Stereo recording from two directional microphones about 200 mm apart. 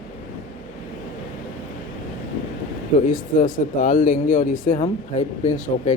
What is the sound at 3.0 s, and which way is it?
Speech, 40° left (ahead or behind).